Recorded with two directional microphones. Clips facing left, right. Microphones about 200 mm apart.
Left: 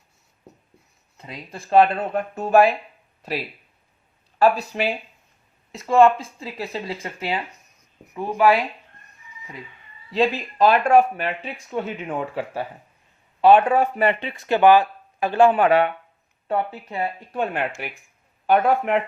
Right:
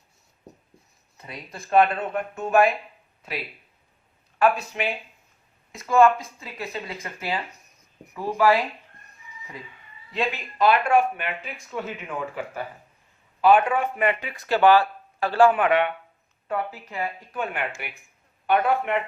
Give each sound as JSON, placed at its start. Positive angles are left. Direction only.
{"t": 1.5, "sound": "speech", "side_deg": 30}
{"t": 4.4, "sound": "speech", "side_deg": 35}
{"t": 10.1, "sound": "speech", "side_deg": 35}
{"t": 15.6, "sound": "speech", "side_deg": 40}